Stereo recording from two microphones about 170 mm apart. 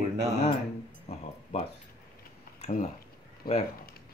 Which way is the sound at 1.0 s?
40° left (ahead or behind).